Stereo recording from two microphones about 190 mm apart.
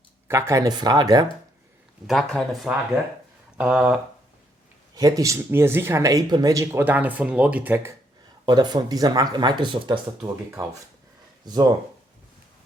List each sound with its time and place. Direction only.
0.3 s speech: 15° right (ahead or behind)
2.0 s speech: centre (ahead or behind)
4.9 s speech: 20° right (ahead or behind)
8.4 s speech: 20° right (ahead or behind)